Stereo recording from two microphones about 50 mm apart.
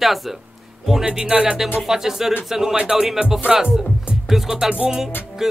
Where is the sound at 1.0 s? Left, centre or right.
Centre.